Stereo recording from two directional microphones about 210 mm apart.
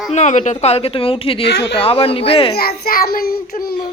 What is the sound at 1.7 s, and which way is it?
Speech, 25° left (ahead or behind).